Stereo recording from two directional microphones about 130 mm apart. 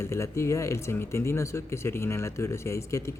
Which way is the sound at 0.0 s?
20° left (ahead or behind).